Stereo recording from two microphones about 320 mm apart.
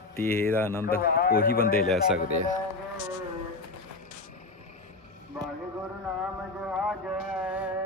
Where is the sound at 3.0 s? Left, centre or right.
Right.